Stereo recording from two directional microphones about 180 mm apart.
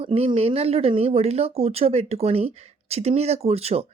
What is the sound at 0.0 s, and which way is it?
Speech, 30° right (ahead or behind).